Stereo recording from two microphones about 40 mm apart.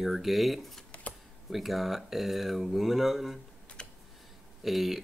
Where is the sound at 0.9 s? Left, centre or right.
Left.